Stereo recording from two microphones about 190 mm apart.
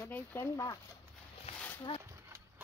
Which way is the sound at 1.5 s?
35° left (ahead or behind).